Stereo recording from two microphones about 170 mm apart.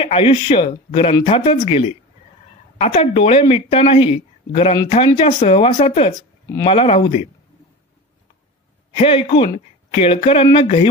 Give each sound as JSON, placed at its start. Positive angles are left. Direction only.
{"t": 0.0, "sound": "speech", "side_deg": 30}
{"t": 8.9, "sound": "speech", "side_deg": 35}